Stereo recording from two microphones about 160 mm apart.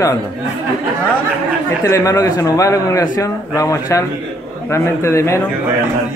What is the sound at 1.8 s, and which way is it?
Speech, 20° left (ahead or behind).